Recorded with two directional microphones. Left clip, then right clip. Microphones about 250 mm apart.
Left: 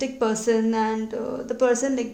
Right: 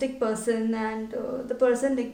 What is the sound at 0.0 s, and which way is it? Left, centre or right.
Speech, left.